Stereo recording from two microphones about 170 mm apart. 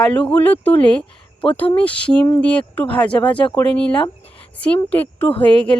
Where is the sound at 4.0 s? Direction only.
30° left (ahead or behind).